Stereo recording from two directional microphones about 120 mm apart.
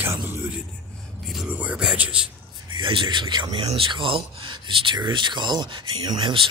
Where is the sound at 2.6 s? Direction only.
45° right (ahead or behind).